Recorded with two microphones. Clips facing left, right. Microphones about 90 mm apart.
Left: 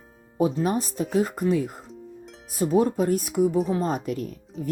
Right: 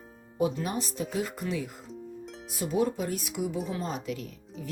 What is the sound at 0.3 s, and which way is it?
Speech, 35° left (ahead or behind).